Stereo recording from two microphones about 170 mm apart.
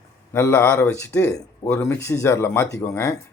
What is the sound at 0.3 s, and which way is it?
Speech, 15° left (ahead or behind).